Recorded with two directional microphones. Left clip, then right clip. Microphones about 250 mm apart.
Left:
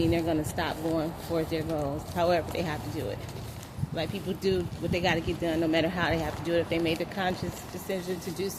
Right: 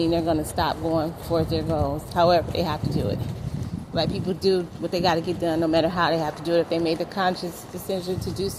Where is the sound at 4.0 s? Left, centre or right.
Right.